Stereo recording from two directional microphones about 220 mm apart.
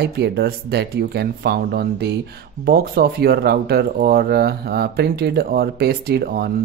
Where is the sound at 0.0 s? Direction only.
45° right (ahead or behind).